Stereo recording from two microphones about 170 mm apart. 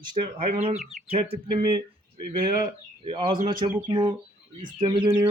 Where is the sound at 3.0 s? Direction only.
30° right (ahead or behind).